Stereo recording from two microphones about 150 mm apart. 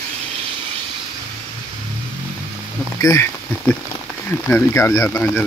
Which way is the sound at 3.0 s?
20° left (ahead or behind).